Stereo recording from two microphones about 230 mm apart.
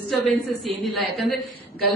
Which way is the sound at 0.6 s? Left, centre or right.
Centre.